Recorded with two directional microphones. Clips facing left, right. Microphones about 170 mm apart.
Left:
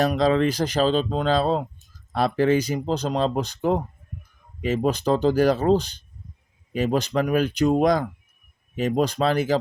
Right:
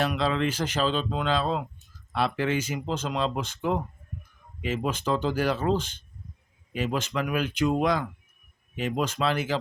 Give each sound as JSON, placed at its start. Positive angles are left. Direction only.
{"t": 0.0, "sound": "speech", "side_deg": 40}